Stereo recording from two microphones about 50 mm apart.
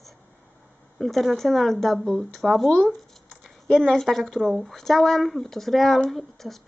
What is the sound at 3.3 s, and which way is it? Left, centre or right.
A woman's voice, centre.